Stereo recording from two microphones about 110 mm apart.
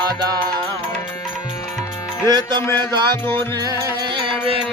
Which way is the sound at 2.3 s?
40° right (ahead or behind).